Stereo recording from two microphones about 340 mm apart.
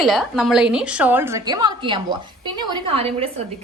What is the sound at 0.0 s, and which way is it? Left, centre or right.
A woman's voice, centre.